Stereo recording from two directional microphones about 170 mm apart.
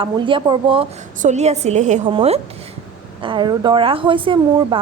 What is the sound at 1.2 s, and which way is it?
A woman's voice, 40° right (ahead or behind).